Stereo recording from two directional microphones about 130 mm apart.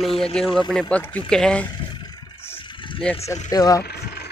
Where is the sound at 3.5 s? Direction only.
30° left (ahead or behind).